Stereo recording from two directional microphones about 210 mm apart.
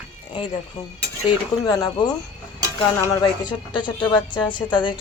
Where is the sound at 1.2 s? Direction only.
20° left (ahead or behind).